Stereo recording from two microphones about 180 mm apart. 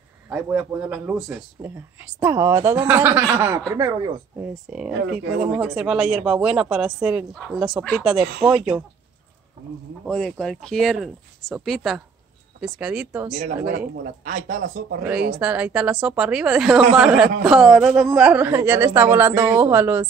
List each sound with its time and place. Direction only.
0.3 s a man's voice: 10° right (ahead or behind)
4.7 s speech: 5° right (ahead or behind)
10.0 s a man's voice: centre (ahead or behind)
13.7 s speech: 55° right (ahead or behind)
15.4 s a man's voice: 10° right (ahead or behind)